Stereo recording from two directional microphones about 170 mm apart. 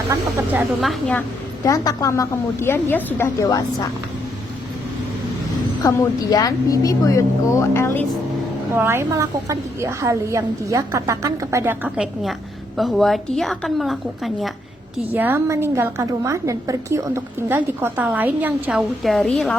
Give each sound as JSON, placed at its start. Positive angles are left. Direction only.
{"t": 0.8, "sound": "a woman's voice", "side_deg": 5}
{"t": 1.6, "sound": "a woman's voice", "side_deg": 20}
{"t": 5.8, "sound": "a woman's voice", "side_deg": 20}
{"t": 8.7, "sound": "a woman's voice", "side_deg": -15}
{"t": 12.7, "sound": "a woman's voice", "side_deg": 0}
{"t": 15.1, "sound": "a woman's voice", "side_deg": -10}